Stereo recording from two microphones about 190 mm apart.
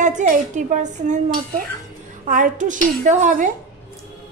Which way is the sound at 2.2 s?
45° right (ahead or behind).